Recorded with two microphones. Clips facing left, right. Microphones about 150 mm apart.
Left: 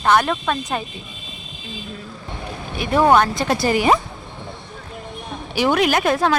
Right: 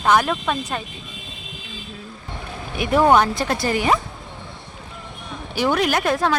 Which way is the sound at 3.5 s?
10° left (ahead or behind).